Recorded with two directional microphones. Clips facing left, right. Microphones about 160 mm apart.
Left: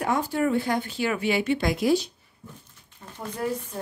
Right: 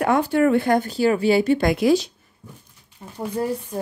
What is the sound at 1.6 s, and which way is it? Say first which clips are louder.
Speech: right 6 dB; 55° right (ahead or behind).